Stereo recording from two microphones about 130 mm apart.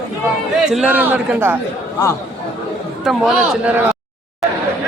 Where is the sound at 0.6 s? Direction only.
5° right (ahead or behind).